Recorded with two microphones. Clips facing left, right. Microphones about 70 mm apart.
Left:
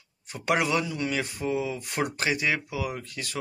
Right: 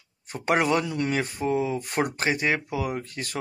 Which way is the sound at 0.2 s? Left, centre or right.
Right.